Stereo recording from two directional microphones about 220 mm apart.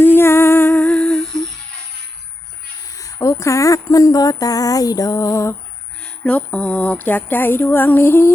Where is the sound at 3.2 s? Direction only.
15° left (ahead or behind).